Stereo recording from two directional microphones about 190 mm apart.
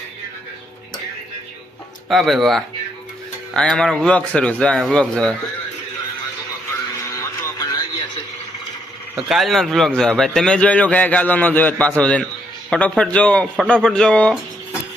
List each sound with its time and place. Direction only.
2.0 s a man's voice: centre (ahead or behind)
7.2 s music: 15° left (ahead or behind)
9.3 s a man's voice: centre (ahead or behind)